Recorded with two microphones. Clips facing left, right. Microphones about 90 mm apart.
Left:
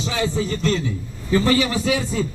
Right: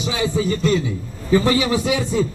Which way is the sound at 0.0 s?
15° right (ahead or behind).